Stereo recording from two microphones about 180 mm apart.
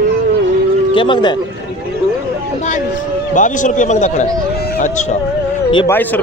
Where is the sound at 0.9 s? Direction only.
25° left (ahead or behind).